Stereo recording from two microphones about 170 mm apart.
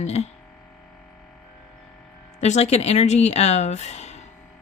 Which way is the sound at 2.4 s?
40° left (ahead or behind).